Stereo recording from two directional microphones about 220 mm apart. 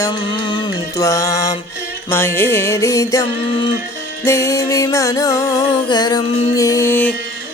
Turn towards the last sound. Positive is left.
turn(degrees=10)  # may be behind; listen again after turning